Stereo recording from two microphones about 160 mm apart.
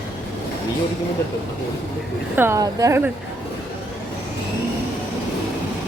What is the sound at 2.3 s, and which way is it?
Speech, 15° right (ahead or behind).